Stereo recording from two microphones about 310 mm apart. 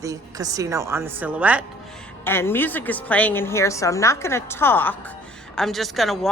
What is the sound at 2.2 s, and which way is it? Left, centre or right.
A woman's voice, centre.